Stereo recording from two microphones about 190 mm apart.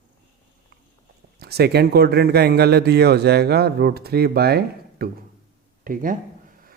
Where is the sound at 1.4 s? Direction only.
60° right (ahead or behind).